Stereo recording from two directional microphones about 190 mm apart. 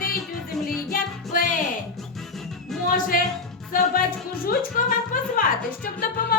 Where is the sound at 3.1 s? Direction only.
45° left (ahead or behind).